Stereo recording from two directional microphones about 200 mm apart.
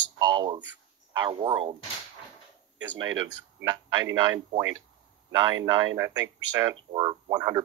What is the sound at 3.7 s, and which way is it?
Speech, 20° right (ahead or behind).